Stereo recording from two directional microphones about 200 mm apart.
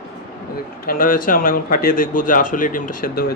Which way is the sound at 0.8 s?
45° left (ahead or behind).